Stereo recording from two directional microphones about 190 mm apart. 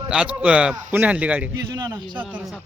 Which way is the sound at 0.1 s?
5° right (ahead or behind).